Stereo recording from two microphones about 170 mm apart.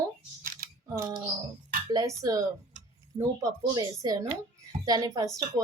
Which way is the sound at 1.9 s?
20° right (ahead or behind).